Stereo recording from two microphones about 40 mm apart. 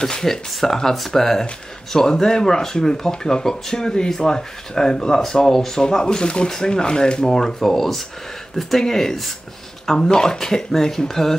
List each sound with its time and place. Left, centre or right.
0.0 s speech: centre